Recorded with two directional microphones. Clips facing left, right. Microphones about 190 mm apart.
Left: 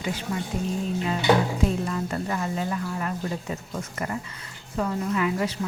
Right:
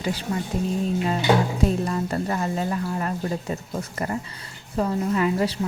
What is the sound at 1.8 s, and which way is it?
A woman's voice, 35° right (ahead or behind).